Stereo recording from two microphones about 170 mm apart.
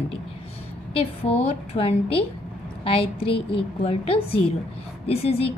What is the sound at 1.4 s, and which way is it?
A woman's voice, 35° left (ahead or behind).